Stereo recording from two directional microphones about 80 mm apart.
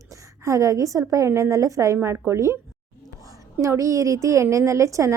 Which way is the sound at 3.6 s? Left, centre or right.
Right.